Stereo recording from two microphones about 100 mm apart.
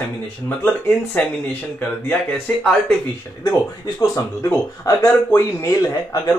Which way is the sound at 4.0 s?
25° left (ahead or behind).